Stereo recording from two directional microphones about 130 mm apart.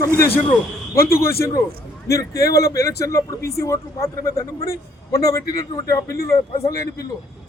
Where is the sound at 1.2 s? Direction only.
20° left (ahead or behind).